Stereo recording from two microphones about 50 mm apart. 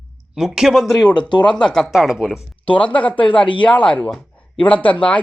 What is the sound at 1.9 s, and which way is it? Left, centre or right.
Speech, centre.